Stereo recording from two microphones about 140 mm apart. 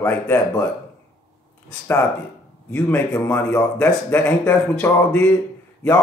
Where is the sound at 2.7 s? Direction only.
15° left (ahead or behind).